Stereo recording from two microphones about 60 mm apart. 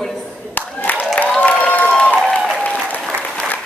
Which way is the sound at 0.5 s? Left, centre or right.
Left.